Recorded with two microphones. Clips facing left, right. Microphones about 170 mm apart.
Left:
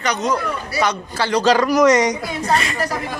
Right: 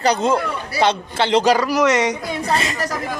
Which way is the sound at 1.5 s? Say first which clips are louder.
Left 1 dB; 5° right (ahead or behind).